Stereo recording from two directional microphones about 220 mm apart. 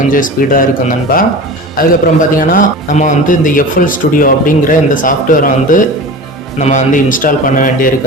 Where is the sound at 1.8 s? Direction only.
40° left (ahead or behind).